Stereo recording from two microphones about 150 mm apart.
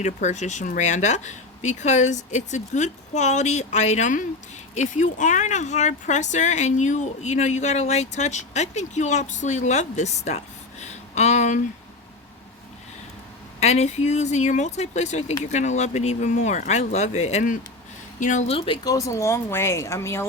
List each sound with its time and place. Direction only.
0.0 s speech: 50° left (ahead or behind)
13.6 s speech: 45° left (ahead or behind)
18.9 s speech: 20° left (ahead or behind)